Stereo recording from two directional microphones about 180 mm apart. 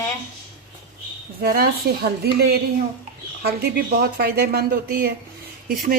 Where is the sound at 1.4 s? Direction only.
55° right (ahead or behind).